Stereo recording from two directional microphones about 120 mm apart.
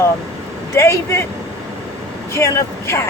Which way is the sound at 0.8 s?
25° left (ahead or behind).